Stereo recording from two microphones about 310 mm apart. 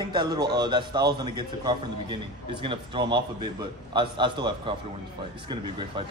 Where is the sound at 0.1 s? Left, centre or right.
Centre.